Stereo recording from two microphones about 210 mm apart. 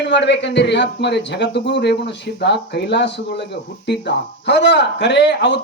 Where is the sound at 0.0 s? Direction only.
55° left (ahead or behind).